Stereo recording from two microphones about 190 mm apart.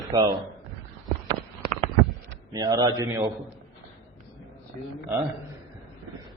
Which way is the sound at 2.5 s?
20° right (ahead or behind).